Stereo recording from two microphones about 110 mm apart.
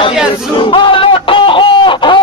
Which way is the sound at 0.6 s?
50° left (ahead or behind).